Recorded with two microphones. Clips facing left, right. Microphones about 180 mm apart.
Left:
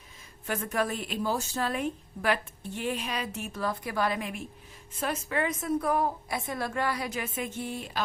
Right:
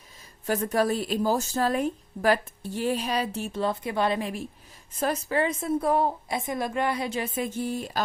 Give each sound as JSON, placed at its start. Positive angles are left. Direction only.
{"t": 0.4, "sound": "a woman's voice", "side_deg": -35}